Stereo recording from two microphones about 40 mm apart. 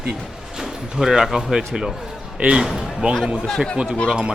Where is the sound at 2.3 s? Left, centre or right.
Right.